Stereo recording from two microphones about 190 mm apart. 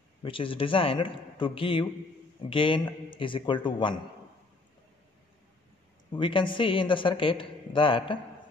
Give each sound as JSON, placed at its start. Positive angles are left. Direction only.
{"t": 0.2, "sound": "a man's voice", "side_deg": 25}
{"t": 6.1, "sound": "a man's voice", "side_deg": 25}